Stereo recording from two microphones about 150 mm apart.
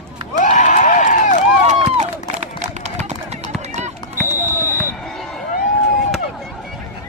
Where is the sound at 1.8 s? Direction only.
45° right (ahead or behind).